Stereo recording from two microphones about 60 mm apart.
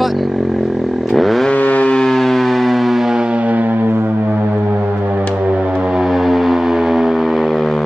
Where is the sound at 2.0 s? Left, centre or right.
Centre; by 5.2 s right.